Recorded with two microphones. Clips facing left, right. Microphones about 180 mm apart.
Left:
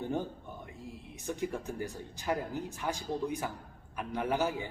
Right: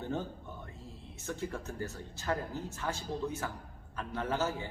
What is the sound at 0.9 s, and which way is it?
A man's voice, 15° left (ahead or behind).